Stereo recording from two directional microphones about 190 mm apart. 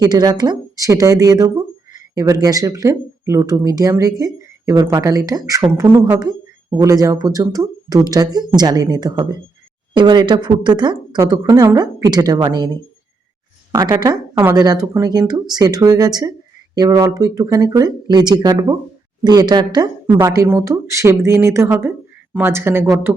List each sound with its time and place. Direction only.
0.0 s speech: 20° right (ahead or behind)
13.7 s speech: 20° right (ahead or behind)